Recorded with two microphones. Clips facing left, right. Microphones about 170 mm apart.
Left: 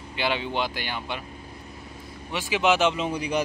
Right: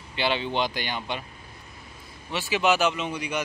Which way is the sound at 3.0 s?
35° left (ahead or behind).